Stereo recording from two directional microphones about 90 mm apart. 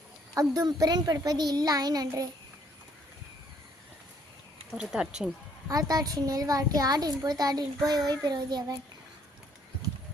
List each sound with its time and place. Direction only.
0.3 s a child's voice: 40° right (ahead or behind)
4.8 s speech: 10° right (ahead or behind)
5.6 s a child's voice: 45° right (ahead or behind)